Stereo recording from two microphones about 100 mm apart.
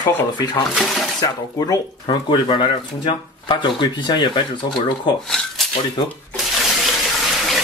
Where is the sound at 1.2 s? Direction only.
40° left (ahead or behind).